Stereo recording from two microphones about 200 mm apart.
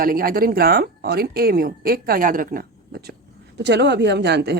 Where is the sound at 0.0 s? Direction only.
45° right (ahead or behind).